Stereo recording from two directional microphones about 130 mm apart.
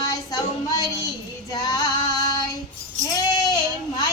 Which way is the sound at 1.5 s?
30° left (ahead or behind).